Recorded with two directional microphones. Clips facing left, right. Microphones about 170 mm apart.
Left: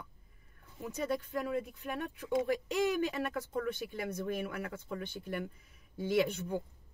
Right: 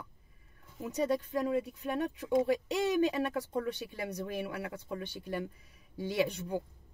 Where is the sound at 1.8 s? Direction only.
25° right (ahead or behind).